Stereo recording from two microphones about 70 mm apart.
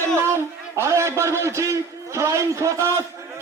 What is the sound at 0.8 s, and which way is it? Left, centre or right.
A man's voice, right.